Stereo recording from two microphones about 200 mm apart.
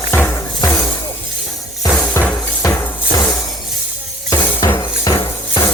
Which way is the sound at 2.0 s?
15° left (ahead or behind).